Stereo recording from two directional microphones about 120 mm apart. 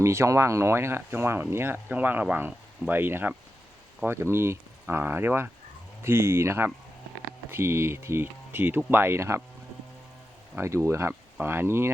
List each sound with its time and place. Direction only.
0.0 s speech: 25° right (ahead or behind)
10.5 s speech: 20° right (ahead or behind)